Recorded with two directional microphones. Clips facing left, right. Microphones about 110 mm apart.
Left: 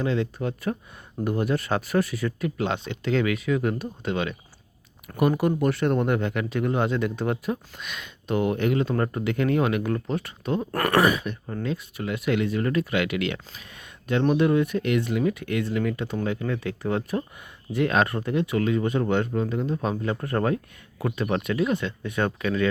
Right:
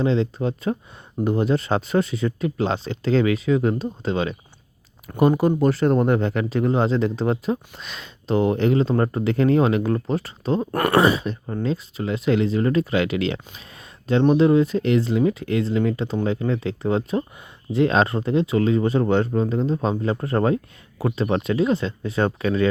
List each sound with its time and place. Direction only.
0.0 s speech: 25° right (ahead or behind)